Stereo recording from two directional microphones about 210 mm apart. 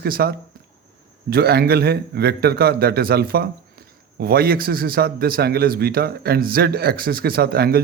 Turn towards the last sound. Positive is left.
turn(degrees=-45)  # may be behind; listen again after turning